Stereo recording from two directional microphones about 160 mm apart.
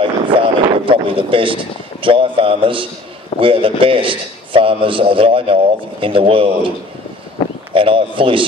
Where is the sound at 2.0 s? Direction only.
35° right (ahead or behind).